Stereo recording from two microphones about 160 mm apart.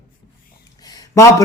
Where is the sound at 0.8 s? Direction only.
20° left (ahead or behind).